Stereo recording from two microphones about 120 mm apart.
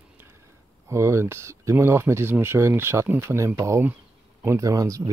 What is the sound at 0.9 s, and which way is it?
Speech, 25° right (ahead or behind).